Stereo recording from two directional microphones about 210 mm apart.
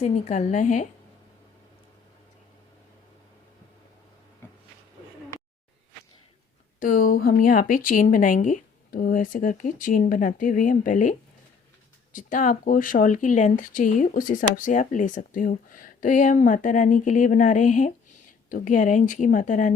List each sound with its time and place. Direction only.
0.0 s speech: 35° left (ahead or behind)
6.7 s speech: 40° left (ahead or behind)
12.1 s speech: 40° left (ahead or behind)